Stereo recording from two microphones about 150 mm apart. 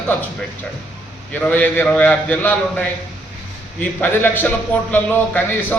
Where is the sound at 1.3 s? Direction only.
10° left (ahead or behind).